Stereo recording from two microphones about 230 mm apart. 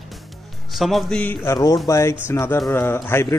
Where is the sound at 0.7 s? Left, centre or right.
Centre.